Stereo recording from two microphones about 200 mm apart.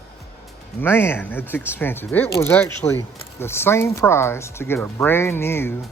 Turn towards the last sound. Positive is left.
turn(degrees=10)  # may be behind; listen again after turning